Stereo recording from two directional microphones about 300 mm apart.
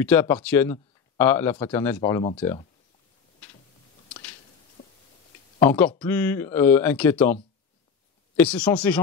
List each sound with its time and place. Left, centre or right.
0.0 s speech: centre
4.8 s a sound: left
5.7 s speech: centre
8.4 s speech: centre